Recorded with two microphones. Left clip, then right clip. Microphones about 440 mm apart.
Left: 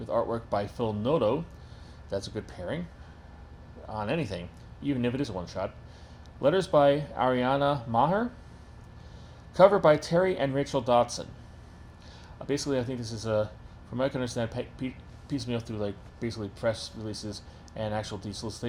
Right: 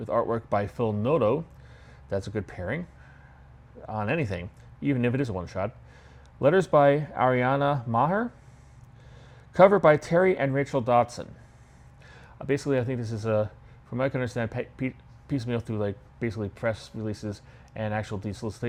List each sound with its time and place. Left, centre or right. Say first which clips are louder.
0.0 s speech: right 3 dB; right
3.8 s speech: right 3 dB; right
9.5 s speech: right 2 dB; right
12.4 s speech: right 3 dB; right